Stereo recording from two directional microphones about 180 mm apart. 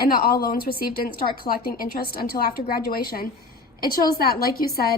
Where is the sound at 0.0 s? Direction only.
55° left (ahead or behind).